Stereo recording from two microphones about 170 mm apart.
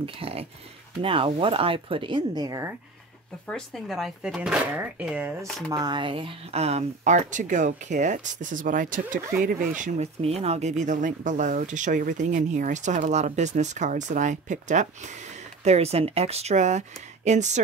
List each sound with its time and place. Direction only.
0.0 s speech: 35° right (ahead or behind)
3.4 s speech: 5° left (ahead or behind)
5.7 s speech: 25° right (ahead or behind); by 17.6 s 45° right (ahead or behind)